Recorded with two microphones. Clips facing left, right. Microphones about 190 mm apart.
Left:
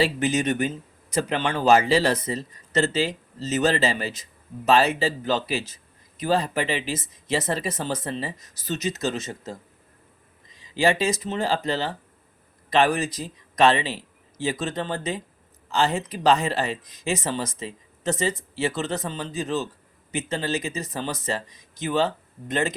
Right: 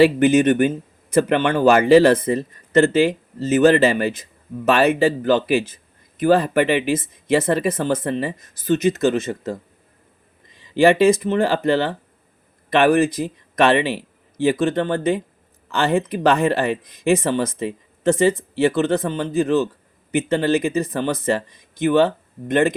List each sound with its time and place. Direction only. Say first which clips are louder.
0.0 s speech: right 9 dB; 55° right (ahead or behind)